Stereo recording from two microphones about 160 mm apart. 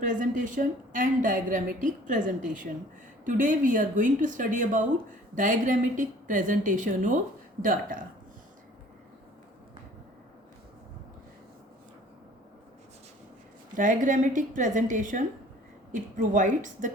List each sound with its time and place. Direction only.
0.0 s a woman's voice: 50° right (ahead or behind)
13.7 s a woman's voice: 55° right (ahead or behind)